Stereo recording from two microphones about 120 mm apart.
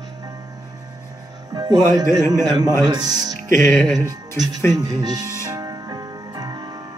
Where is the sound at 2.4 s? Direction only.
35° right (ahead or behind).